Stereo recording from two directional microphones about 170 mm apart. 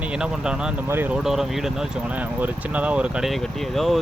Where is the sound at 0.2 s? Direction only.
5° right (ahead or behind).